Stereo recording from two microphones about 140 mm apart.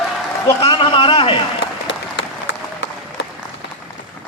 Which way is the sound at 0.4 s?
40° left (ahead or behind).